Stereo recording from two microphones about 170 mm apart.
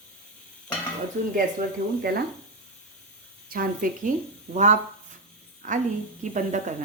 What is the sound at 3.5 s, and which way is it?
Speech, 55° right (ahead or behind).